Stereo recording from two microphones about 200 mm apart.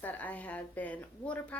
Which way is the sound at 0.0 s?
10° left (ahead or behind).